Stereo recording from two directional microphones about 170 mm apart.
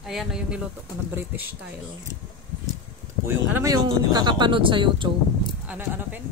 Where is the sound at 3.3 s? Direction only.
15° right (ahead or behind).